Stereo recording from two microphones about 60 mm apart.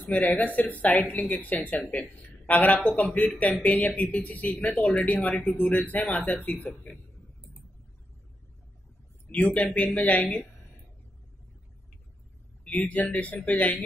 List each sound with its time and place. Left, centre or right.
0.0 s a woman's voice: left
9.3 s a woman's voice: left
12.6 s a woman's voice: left